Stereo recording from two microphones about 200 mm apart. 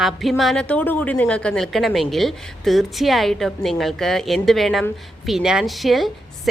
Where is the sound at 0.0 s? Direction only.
Centre (ahead or behind).